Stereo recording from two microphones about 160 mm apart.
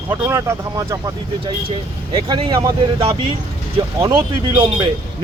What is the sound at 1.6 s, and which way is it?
Speech, 35° right (ahead or behind).